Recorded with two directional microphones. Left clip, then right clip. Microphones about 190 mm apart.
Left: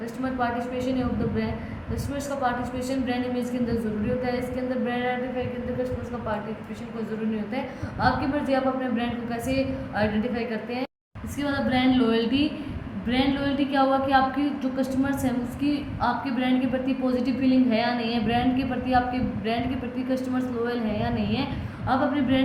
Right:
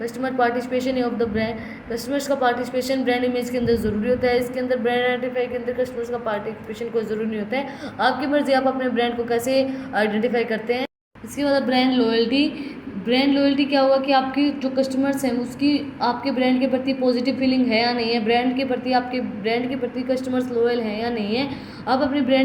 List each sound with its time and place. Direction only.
0.3 s a man's voice: 50° right (ahead or behind)
4.2 s a man's voice: 50° right (ahead or behind)
7.5 s a man's voice: 45° right (ahead or behind)
11.3 s a woman's voice: 25° right (ahead or behind)
20.1 s a woman's voice: 25° right (ahead or behind)